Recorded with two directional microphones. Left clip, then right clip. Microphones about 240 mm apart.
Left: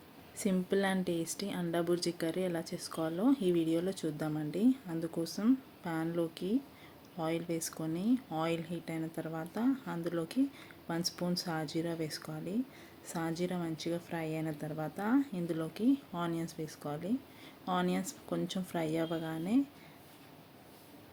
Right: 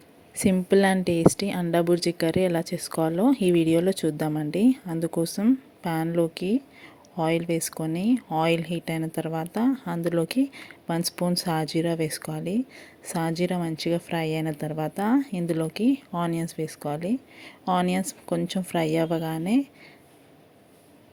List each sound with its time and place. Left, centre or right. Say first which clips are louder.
0.3 s speech: right 12 dB; right